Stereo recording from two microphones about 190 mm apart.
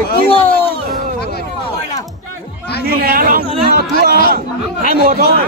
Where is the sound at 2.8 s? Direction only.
50° right (ahead or behind).